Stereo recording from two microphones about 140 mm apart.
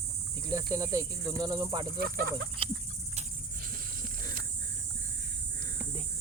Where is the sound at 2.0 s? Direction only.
90° right.